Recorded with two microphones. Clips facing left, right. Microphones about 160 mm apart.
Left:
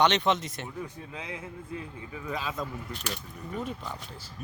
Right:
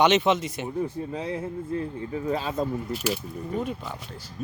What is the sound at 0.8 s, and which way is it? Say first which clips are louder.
Speech: right 13 dB; 35° right (ahead or behind).